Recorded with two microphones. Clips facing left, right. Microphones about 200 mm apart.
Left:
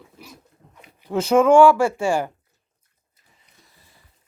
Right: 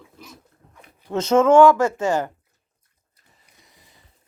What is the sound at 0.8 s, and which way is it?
Speech, 10° left (ahead or behind).